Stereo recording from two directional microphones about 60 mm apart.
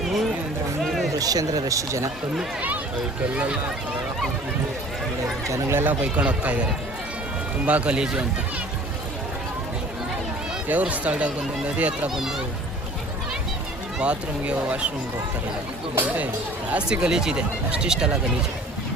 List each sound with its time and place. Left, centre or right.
0.0 s run: centre
0.8 s a sound: centre
1.2 s speech: right
5.7 s speech: right; by 8.2 s centre
10.7 s speech: right
14.0 s speech: centre
16.7 s speech: centre